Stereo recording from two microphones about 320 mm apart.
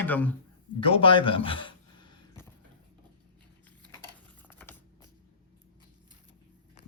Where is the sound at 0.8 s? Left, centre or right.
Centre.